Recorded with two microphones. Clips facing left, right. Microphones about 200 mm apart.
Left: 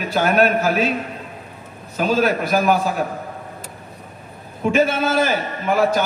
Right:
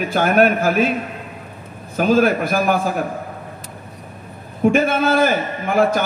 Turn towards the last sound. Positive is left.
turn(degrees=-55)  # may be behind; listen again after turning